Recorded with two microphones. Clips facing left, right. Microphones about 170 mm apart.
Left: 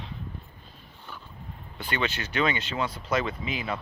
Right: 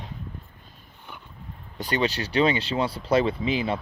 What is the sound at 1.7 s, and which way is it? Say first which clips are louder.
Speech: right 5 dB; 40° right (ahead or behind).